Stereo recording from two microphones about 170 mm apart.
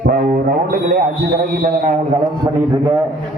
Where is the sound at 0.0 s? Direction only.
60° right (ahead or behind).